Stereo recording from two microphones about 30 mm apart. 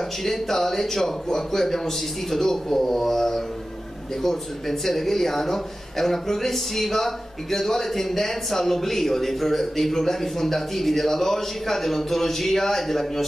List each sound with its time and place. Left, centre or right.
0.2 s speech: centre